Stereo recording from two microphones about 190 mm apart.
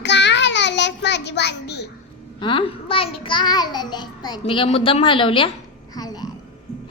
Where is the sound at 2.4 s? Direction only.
25° left (ahead or behind).